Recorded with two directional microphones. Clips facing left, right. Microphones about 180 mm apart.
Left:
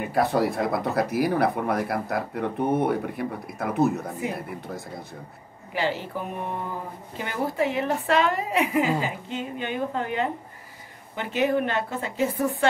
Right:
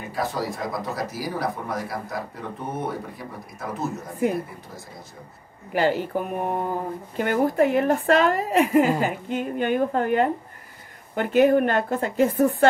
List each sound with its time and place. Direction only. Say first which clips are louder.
0.0 s speech: left 5 dB; 60° left (ahead or behind)
5.7 s a woman's voice: right 5 dB; 50° right (ahead or behind)